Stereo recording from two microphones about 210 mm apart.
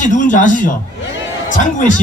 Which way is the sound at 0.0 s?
35° left (ahead or behind).